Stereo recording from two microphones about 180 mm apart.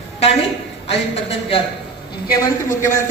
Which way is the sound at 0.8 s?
35° left (ahead or behind).